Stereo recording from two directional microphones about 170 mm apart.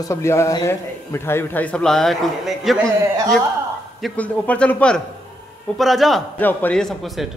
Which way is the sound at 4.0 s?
5° left (ahead or behind).